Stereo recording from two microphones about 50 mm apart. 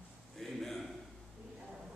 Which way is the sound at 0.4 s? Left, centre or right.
Centre.